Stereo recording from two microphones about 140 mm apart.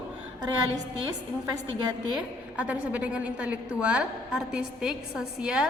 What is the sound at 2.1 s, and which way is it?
A woman's voice, 10° right (ahead or behind).